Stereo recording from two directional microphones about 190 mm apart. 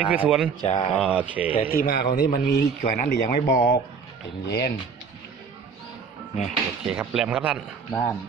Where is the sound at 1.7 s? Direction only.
50° left (ahead or behind).